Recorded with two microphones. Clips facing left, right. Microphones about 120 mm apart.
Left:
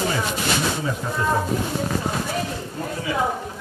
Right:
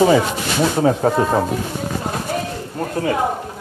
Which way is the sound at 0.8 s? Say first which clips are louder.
Right 10 dB; 65° right (ahead or behind).